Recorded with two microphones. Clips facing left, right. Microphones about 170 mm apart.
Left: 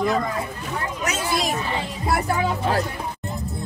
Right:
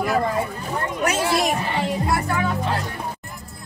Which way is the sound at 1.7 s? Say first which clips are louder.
Right 4 dB; 70° right (ahead or behind).